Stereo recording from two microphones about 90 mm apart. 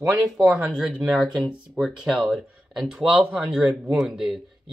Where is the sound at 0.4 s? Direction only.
15° right (ahead or behind).